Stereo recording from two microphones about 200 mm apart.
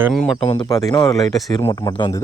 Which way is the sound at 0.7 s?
15° left (ahead or behind).